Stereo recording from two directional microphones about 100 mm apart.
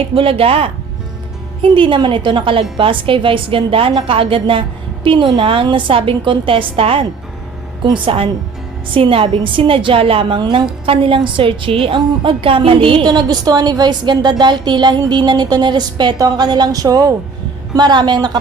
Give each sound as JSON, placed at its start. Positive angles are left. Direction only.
{"t": 0.1, "sound": "speech", "side_deg": -70}
{"t": 1.6, "sound": "a woman's voice", "side_deg": -60}